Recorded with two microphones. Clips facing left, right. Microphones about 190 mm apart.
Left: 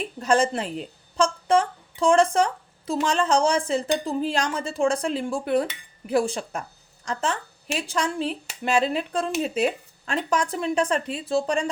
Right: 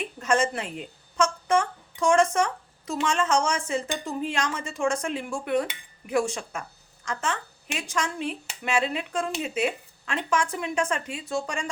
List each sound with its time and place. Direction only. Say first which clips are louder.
0.2 s a woman's voice: left 3 dB; 35° left (ahead or behind)